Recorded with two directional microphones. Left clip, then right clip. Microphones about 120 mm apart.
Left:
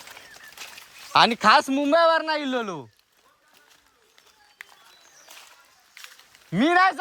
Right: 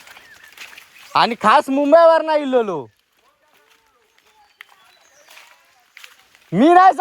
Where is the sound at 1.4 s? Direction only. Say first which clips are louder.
Right 4 dB; 5° left (ahead or behind).